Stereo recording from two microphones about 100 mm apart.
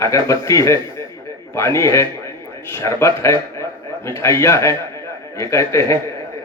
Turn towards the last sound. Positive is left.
turn(degrees=30)  # may be behind; listen again after turning